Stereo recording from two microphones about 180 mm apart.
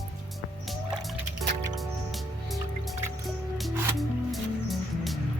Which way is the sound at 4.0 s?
Centre (ahead or behind).